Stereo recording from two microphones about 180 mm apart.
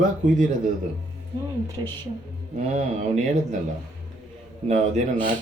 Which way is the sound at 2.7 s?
40° right (ahead or behind).